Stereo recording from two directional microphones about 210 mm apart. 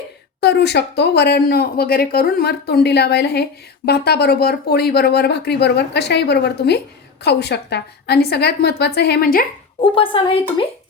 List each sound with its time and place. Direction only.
0.3 s speech: 55° left (ahead or behind)
9.8 s a woman's voice: 25° left (ahead or behind)